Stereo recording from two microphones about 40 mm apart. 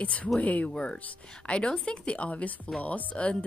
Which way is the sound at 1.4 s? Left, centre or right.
Left.